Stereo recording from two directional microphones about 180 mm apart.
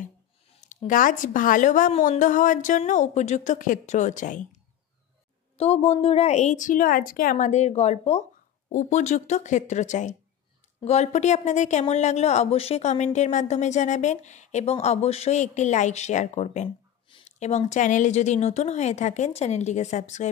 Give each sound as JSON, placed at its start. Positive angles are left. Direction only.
{"t": 0.8, "sound": "a woman's voice", "side_deg": 45}
{"t": 5.6, "sound": "speech", "side_deg": 35}